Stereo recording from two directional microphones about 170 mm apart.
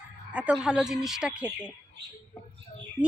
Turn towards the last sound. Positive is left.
turn(degrees=-5)  # may be behind; listen again after turning